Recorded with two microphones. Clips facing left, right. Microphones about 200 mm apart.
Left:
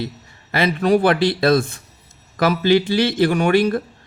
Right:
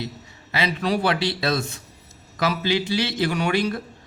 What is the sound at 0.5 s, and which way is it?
Speech, 50° left (ahead or behind).